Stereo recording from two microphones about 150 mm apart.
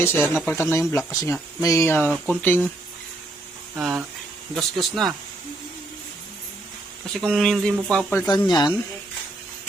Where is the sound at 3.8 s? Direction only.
5° right (ahead or behind).